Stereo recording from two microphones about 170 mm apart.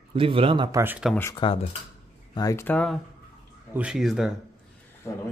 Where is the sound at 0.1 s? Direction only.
30° right (ahead or behind).